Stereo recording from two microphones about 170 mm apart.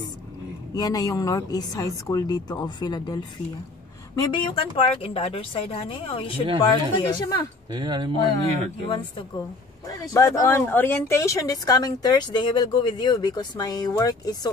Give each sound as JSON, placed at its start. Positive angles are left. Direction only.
{"t": 0.7, "sound": "a woman's voice", "side_deg": 20}
{"t": 7.7, "sound": "speech", "side_deg": -25}
{"t": 8.8, "sound": "speech", "side_deg": 30}
{"t": 9.8, "sound": "speech", "side_deg": 20}